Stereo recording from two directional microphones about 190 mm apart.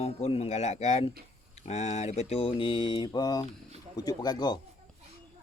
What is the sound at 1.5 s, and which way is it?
Mantra, 35° left (ahead or behind).